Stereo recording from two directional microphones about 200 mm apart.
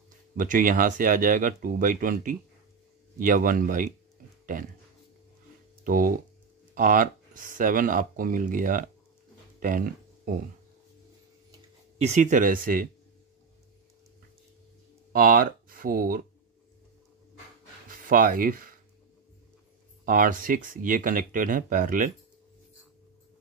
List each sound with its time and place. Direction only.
0.4 s speech: 40° right (ahead or behind)
5.9 s speech: 45° right (ahead or behind)
9.6 s a sound: 45° right (ahead or behind)
12.0 s speech: 35° right (ahead or behind)
15.1 s speech: 45° right (ahead or behind)
17.8 s speech: 45° right (ahead or behind)
20.1 s speech: 45° right (ahead or behind)